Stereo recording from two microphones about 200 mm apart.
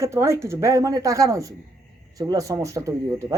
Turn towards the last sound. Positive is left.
turn(degrees=-15)  # may be behind; listen again after turning